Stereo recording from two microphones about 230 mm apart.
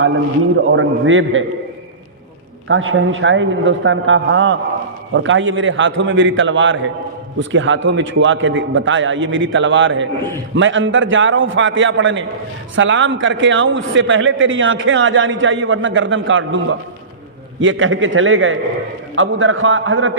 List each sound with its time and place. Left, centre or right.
0.5 s a man's voice: right
2.6 s a man's voice: right
17.6 s a man's voice: right